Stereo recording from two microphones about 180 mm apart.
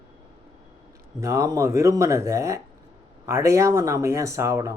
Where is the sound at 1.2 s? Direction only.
15° right (ahead or behind).